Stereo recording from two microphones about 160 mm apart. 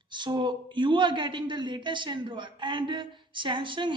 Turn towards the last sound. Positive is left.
turn(degrees=-30)  # may be behind; listen again after turning